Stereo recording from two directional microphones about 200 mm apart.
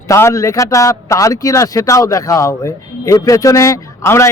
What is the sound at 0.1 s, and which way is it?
Speech, 15° left (ahead or behind).